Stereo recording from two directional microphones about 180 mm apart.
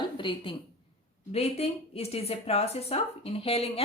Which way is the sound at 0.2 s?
30° left (ahead or behind).